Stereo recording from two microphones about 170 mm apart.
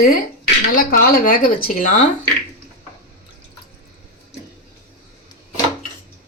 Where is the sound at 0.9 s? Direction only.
60° left (ahead or behind).